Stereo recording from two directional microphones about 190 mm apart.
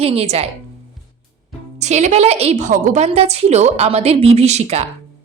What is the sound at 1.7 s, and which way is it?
A woman's voice, 35° right (ahead or behind).